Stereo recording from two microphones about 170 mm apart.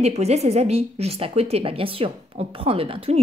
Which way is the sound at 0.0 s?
40° right (ahead or behind).